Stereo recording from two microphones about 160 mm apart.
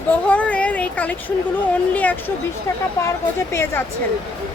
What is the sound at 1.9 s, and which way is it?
Speech, 10° left (ahead or behind).